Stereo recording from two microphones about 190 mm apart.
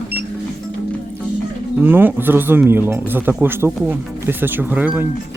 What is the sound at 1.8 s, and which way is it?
Speech, 10° right (ahead or behind).